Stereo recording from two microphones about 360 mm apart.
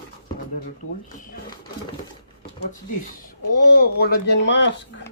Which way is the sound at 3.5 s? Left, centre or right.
Left.